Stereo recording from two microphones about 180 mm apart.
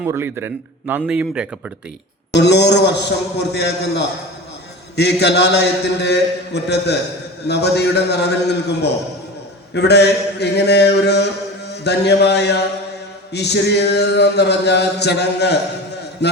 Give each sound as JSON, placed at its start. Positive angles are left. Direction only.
{"t": 0.0, "sound": "a man's voice", "side_deg": -10}
{"t": 2.3, "sound": "a sound", "side_deg": 70}
{"t": 16.2, "sound": "a man's voice", "side_deg": 70}